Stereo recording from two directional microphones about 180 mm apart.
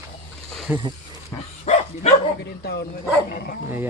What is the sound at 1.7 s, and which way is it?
Dog, 35° left (ahead or behind).